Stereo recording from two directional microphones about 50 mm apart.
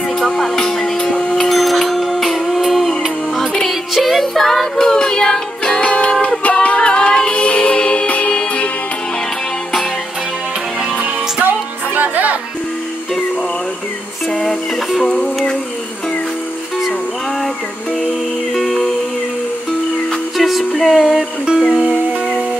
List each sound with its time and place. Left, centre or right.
0.3 s a sound: centre
3.9 s music: centre; by 8.6 s left
11.4 s music: right
14.3 s music: centre
18.5 s music: centre
20.3 s music: centre